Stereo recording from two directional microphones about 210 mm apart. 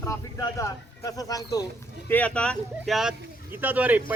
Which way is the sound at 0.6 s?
15° left (ahead or behind).